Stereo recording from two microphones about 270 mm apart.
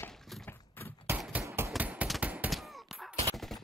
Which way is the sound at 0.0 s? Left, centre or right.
Centre.